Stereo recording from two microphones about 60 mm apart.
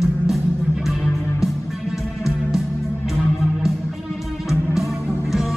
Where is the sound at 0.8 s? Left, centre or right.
Centre.